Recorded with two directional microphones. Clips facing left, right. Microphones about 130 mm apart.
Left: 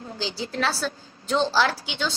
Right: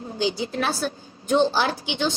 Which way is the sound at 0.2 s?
20° right (ahead or behind).